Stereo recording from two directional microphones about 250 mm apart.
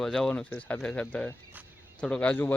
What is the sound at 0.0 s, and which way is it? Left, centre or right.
Speech, centre.